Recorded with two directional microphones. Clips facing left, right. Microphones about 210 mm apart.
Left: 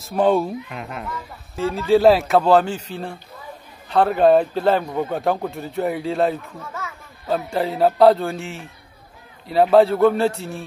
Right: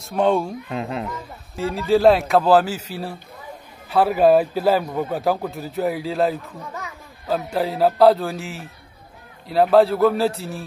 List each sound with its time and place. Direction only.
0.0 s a man's voice: centre (ahead or behind)
0.7 s a child's voice: 30° right (ahead or behind)
1.6 s a man's voice: centre (ahead or behind)
6.6 s a child's voice: 15° right (ahead or behind)
7.2 s a man's voice: centre (ahead or behind)